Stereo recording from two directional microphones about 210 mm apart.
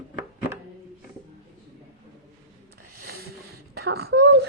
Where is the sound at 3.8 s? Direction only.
50° right (ahead or behind).